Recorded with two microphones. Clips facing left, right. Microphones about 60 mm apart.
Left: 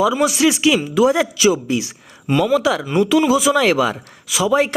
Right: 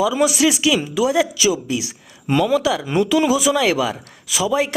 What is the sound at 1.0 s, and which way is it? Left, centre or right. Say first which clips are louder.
A man's voice: left 3 dB; left.